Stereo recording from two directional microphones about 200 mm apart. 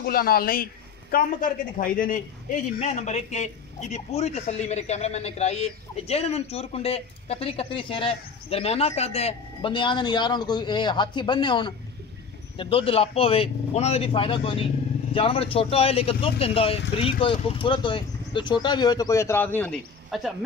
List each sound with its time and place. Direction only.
0.0 s a man's voice: 50° left (ahead or behind); by 20.3 s centre (ahead or behind)